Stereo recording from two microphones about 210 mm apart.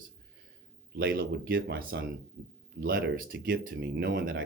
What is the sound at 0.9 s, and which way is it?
Speech, 45° right (ahead or behind).